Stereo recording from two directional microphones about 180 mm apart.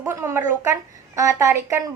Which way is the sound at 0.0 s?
15° right (ahead or behind).